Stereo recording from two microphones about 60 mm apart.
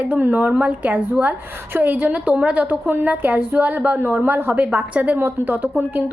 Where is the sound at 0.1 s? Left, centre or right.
Right.